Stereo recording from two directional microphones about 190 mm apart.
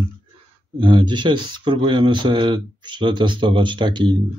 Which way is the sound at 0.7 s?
25° right (ahead or behind).